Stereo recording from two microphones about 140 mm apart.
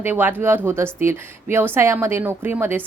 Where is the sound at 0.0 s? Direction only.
15° right (ahead or behind).